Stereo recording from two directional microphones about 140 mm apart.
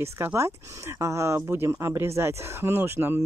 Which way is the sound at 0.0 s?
20° right (ahead or behind).